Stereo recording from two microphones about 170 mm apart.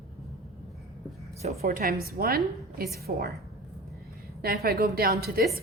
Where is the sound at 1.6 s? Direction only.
60° right (ahead or behind).